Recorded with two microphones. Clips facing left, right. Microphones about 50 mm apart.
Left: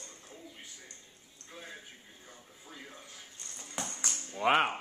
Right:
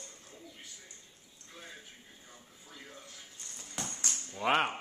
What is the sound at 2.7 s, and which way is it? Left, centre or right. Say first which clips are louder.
Television: left 1 dB; centre.